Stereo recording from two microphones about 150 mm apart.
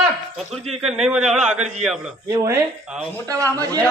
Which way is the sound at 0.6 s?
45° right (ahead or behind).